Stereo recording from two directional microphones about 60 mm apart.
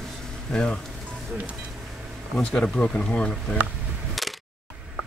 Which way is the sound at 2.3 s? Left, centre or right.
Centre.